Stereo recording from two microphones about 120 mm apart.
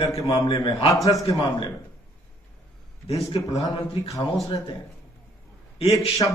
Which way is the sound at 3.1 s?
25° left (ahead or behind).